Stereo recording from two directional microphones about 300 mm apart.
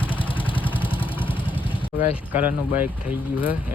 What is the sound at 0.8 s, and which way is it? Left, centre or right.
Vehicle, centre.